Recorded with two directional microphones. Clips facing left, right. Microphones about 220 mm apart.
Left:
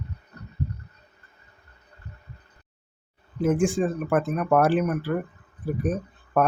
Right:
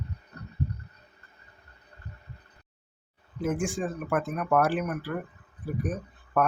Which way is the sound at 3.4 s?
25° left (ahead or behind).